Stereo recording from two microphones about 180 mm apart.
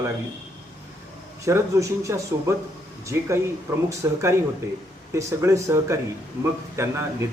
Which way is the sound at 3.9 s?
15° right (ahead or behind).